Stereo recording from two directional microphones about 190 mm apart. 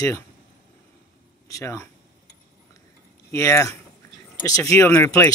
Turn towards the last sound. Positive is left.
turn(degrees=15)  # may be behind; listen again after turning